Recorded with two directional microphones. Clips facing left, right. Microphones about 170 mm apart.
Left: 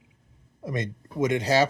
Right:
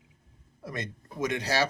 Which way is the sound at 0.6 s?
20° left (ahead or behind).